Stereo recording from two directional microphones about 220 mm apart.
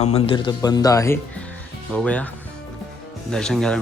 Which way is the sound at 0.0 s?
30° left (ahead or behind).